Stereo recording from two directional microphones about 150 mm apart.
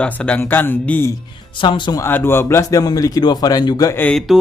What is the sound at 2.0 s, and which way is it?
A man's voice, 15° left (ahead or behind).